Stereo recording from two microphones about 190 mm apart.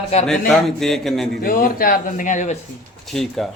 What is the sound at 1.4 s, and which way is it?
Speech, 50° left (ahead or behind).